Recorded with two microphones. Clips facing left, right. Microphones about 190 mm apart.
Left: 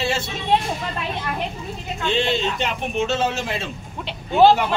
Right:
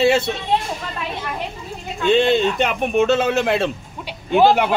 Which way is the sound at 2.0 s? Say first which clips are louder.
Right 7 dB; 55° right (ahead or behind).